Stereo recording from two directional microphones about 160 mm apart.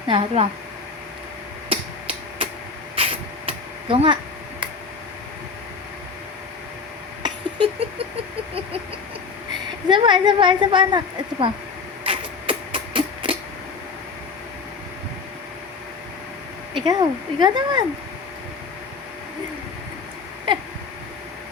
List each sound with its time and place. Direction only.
0.1 s speech: 30° right (ahead or behind)
1.7 s tick-tock: 35° right (ahead or behind)
2.9 s a sound: 35° right (ahead or behind)
7.2 s a sound: 35° right (ahead or behind)
9.9 s a woman's voice: 30° right (ahead or behind)
12.0 s hammer: 35° right (ahead or behind)
16.8 s a woman's voice: 25° right (ahead or behind)